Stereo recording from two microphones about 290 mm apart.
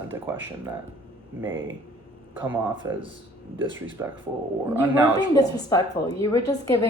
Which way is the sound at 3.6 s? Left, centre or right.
Right.